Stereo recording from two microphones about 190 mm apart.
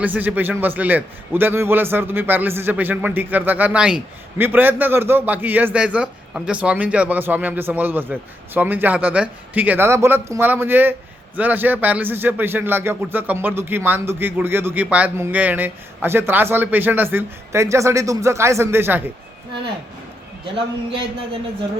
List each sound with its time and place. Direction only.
0.0 s a man's voice: 10° right (ahead or behind)
20.4 s a man's voice: 25° right (ahead or behind)